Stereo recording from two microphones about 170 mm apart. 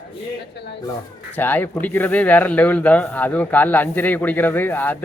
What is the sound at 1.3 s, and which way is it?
Speech, 10° left (ahead or behind).